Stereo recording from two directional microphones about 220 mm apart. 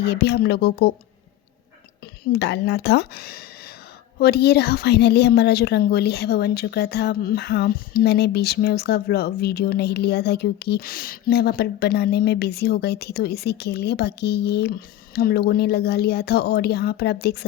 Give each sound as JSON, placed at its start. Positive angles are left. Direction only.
{"t": 0.0, "sound": "a woman's voice", "side_deg": 50}
{"t": 2.3, "sound": "a woman's voice", "side_deg": 50}